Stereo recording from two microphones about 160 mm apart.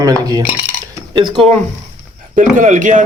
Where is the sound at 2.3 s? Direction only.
55° right (ahead or behind).